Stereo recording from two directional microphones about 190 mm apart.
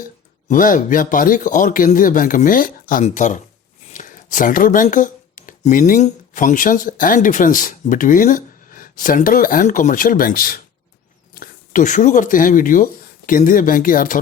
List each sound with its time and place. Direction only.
0.4 s a man's voice: 45° left (ahead or behind)